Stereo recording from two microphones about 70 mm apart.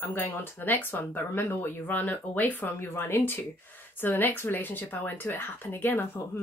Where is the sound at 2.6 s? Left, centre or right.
Left.